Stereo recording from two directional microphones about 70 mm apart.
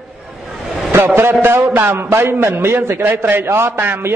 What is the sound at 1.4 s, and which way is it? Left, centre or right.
A man's voice, right.